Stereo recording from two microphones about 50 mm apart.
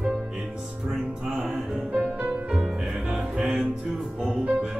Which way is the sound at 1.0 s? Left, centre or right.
Right.